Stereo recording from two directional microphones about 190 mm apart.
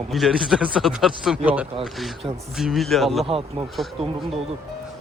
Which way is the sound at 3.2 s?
30° right (ahead or behind).